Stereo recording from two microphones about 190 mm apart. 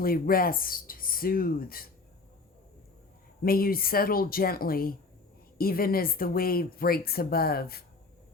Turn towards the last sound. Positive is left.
turn(degrees=55)  # may be behind; listen again after turning